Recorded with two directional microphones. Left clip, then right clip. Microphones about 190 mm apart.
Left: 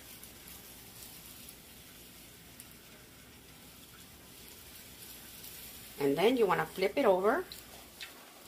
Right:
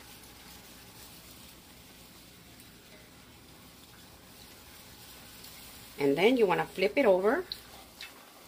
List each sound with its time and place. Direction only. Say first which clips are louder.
5.9 s speech: right 3 dB; 25° right (ahead or behind)